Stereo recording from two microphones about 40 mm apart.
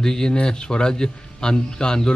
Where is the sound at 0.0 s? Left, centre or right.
Centre.